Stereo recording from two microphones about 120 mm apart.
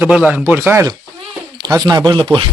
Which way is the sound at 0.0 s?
5° right (ahead or behind).